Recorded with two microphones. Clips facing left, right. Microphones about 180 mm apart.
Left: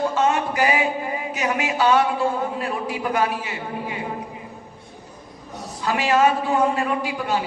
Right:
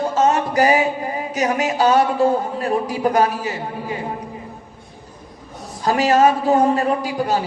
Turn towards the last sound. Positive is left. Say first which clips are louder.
# right 3 dB
turn(degrees=-40)  # may be behind; listen again after turning